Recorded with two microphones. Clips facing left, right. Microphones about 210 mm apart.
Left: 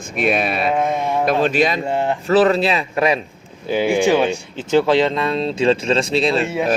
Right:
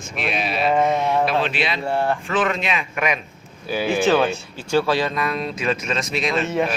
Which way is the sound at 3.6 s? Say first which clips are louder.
Left 3 dB; 20° left (ahead or behind).